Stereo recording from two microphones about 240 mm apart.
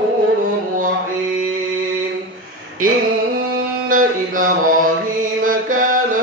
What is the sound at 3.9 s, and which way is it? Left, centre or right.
Mantra, right.